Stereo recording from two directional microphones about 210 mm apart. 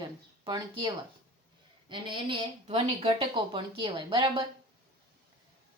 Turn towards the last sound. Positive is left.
turn(degrees=-25)  # may be behind; listen again after turning